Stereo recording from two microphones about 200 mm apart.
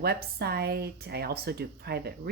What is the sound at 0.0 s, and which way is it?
Speech, 50° right (ahead or behind).